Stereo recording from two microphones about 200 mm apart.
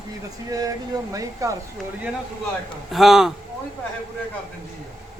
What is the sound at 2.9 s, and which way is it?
Speech, centre (ahead or behind).